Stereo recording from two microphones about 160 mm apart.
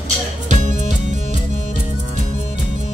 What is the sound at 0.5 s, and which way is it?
Music, 50° right (ahead or behind).